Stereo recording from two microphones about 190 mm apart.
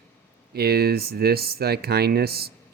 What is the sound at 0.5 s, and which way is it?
Speech, 55° right (ahead or behind).